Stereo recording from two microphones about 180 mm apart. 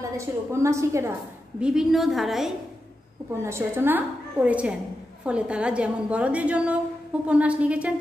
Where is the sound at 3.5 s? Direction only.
15° right (ahead or behind).